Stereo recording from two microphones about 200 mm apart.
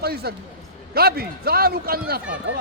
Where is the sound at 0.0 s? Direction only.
50° right (ahead or behind).